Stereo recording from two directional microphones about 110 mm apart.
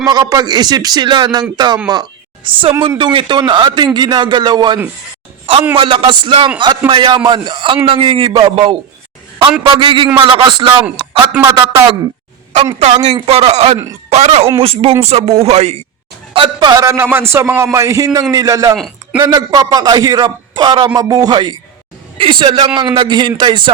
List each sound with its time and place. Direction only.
0.0 s a man's voice: 35° right (ahead or behind)
5.7 s a man's voice: 55° right (ahead or behind)
11.4 s a man's voice: 30° right (ahead or behind)
12.8 s speech: 90° right
13.2 s speech: 70° right (ahead or behind); by 15.8 s 90° right
16.3 s a man's voice: 45° right (ahead or behind)
22.2 s a man's voice: 45° right (ahead or behind)